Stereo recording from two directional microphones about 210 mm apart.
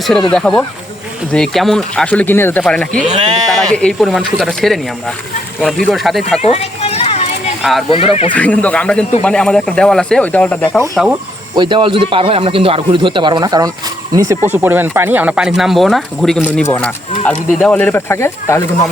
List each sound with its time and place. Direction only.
0.3 s speech: 5° left (ahead or behind)
2.9 s speech: 35° right (ahead or behind)
3.5 s speech: 5° left (ahead or behind)
6.4 s children playing: 30° left (ahead or behind)
7.6 s speech: centre (ahead or behind)
7.9 s speech: 25° left (ahead or behind)
8.3 s speech: 5° left (ahead or behind)
11.5 s a man's voice: 20° right (ahead or behind); by 18.9 s 15° left (ahead or behind)